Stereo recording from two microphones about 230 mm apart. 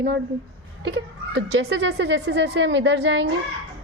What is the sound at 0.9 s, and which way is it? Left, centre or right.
Speech, right.